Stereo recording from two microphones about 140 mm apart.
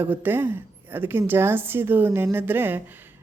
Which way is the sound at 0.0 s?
15° right (ahead or behind).